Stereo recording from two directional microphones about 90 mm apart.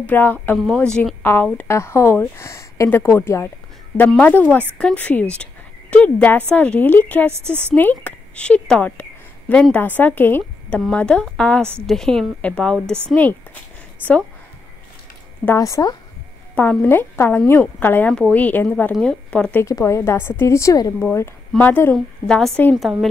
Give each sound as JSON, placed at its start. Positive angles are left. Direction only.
{"t": 0.0, "sound": "a woman's voice", "side_deg": 20}
{"t": 15.5, "sound": "a woman's voice", "side_deg": 35}
{"t": 16.5, "sound": "a woman's voice", "side_deg": 20}
{"t": 19.6, "sound": "a woman's voice", "side_deg": 35}
{"t": 21.9, "sound": "a woman's voice", "side_deg": 5}